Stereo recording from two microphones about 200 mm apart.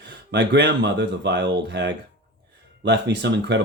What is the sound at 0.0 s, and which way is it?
Speech, 60° right (ahead or behind).